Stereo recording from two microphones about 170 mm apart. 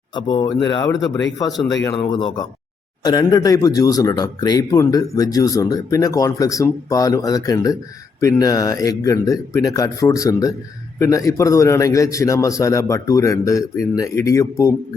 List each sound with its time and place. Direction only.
0.1 s a man's voice: 25° left (ahead or behind)
2.1 s a man's voice: 25° left (ahead or behind)